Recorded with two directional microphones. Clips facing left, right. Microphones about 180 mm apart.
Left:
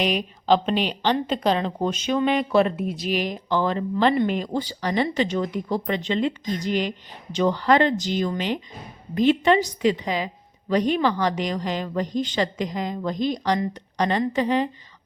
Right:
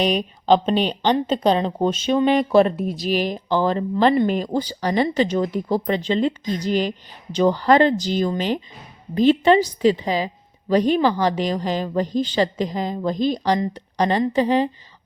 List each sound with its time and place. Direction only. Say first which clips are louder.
0.0 s speech: right 3 dB; 35° right (ahead or behind)